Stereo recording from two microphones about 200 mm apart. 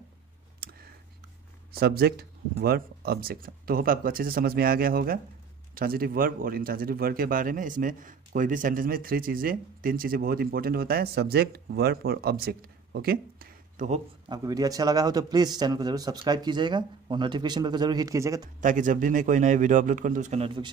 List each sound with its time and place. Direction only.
0.6 s clicking: 50° right (ahead or behind)
1.7 s speech: 50° right (ahead or behind)
14.3 s a man's voice: 20° right (ahead or behind)
18.6 s a man's voice: 40° right (ahead or behind)